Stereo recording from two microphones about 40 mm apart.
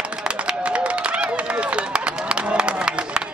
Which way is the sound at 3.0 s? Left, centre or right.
Centre.